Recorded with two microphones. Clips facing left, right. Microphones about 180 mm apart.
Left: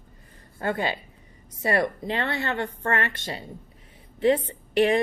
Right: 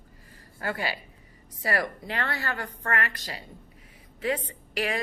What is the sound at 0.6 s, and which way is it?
A woman's voice, 25° left (ahead or behind).